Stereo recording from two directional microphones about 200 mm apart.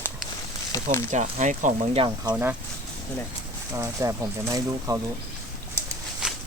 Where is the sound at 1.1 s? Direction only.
40° right (ahead or behind).